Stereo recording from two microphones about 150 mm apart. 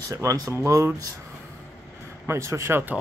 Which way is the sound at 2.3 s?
20° right (ahead or behind).